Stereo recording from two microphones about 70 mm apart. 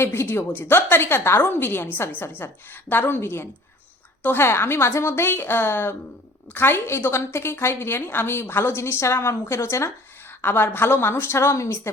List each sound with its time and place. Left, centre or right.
0.0 s a woman's voice: left
10.4 s a woman's voice: left